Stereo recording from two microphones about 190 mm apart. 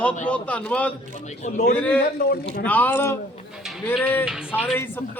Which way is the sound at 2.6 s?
10° left (ahead or behind).